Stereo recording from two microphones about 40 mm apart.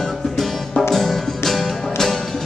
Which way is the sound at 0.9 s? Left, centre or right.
Centre.